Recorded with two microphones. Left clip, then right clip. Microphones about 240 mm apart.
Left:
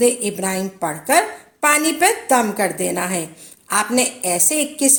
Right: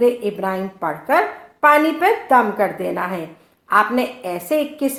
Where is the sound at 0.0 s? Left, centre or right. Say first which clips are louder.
Right 1 dB; left.